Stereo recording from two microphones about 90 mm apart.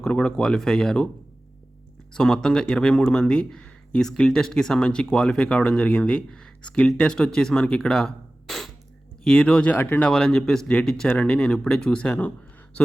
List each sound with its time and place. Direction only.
0.0 s speech: 10° left (ahead or behind)
2.1 s speech: 5° left (ahead or behind)
9.7 s speech: 25° left (ahead or behind)
10.1 s speech: 10° left (ahead or behind)